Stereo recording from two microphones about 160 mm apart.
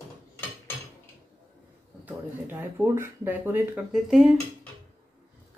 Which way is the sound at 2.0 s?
10° right (ahead or behind).